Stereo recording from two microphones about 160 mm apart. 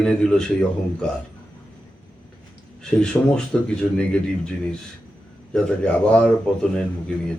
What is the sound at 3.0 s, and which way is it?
A man's voice, 5° left (ahead or behind).